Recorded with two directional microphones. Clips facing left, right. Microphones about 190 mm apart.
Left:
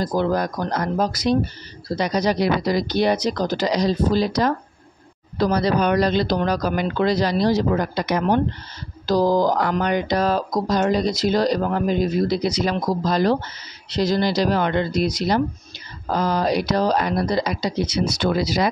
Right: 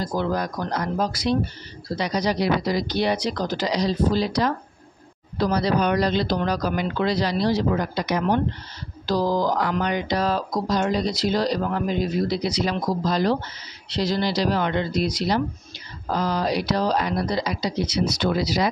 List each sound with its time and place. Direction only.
0.0 s speech: 40° left (ahead or behind)